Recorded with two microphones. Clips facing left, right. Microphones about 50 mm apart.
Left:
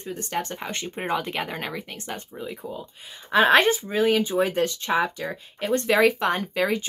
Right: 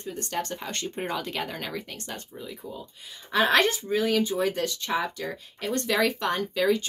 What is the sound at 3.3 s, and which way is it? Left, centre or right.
Speech, left.